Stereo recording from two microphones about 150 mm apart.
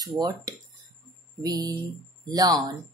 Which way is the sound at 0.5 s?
25° right (ahead or behind).